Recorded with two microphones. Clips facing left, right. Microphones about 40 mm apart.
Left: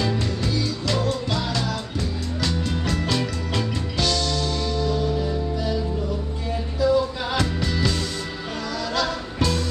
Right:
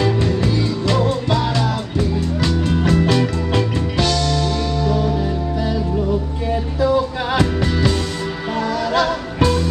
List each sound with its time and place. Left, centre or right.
0.0 s music: right
8.9 s music: right